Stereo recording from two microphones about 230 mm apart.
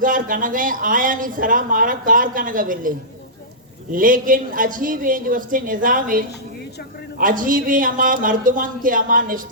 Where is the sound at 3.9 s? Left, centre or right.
Right.